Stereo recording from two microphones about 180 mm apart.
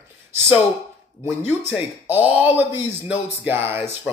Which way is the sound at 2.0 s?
10° right (ahead or behind).